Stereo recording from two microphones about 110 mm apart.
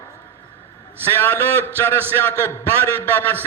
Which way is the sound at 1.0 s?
20° left (ahead or behind).